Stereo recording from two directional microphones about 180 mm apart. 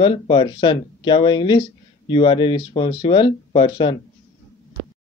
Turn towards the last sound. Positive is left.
turn(degrees=25)  # may be behind; listen again after turning